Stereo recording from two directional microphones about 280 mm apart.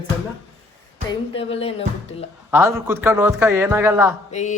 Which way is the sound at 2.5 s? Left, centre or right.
Centre.